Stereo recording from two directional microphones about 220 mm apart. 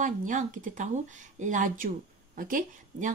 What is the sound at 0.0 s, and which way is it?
Speech, 35° right (ahead or behind).